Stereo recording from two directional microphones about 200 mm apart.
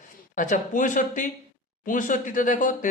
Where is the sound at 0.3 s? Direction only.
40° left (ahead or behind).